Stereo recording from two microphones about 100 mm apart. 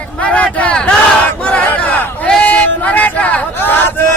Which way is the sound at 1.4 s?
15° left (ahead or behind).